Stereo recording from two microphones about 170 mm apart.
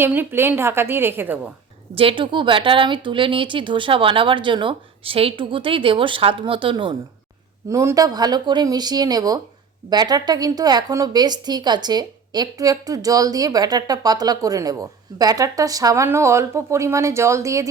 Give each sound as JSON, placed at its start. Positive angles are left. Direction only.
{"t": 0.0, "sound": "a woman's voice", "side_deg": -10}
{"t": 2.0, "sound": "speech", "side_deg": -30}
{"t": 7.7, "sound": "a woman's voice", "side_deg": -20}